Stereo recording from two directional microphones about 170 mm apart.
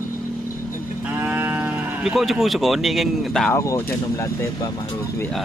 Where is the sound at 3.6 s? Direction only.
15° left (ahead or behind).